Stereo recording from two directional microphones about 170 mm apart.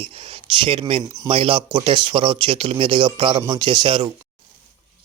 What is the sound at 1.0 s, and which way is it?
Speech, 20° right (ahead or behind).